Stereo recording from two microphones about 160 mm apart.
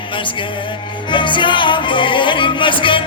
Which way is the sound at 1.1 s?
30° left (ahead or behind).